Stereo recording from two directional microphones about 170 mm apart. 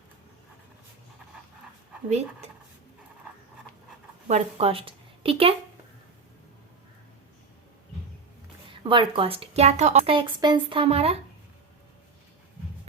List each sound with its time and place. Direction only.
2.0 s speech: 40° right (ahead or behind)
4.3 s speech: 40° right (ahead or behind)
8.8 s speech: 30° right (ahead or behind)